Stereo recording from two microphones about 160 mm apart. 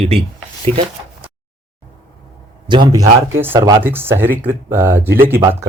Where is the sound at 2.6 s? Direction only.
30° right (ahead or behind).